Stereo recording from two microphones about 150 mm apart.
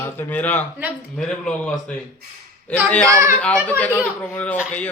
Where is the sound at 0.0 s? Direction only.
10° left (ahead or behind).